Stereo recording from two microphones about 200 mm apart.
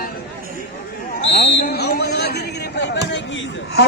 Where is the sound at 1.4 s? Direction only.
55° left (ahead or behind).